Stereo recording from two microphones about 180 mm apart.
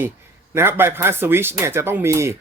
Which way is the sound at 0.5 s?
15° right (ahead or behind).